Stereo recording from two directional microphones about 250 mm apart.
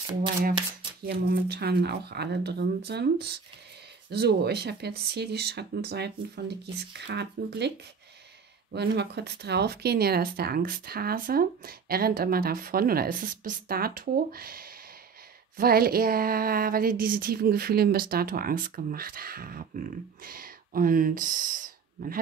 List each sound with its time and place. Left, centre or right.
1.0 s speech: right
8.7 s speech: right